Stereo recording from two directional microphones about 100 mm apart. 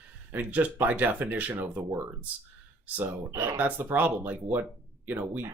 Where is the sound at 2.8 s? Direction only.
20° right (ahead or behind).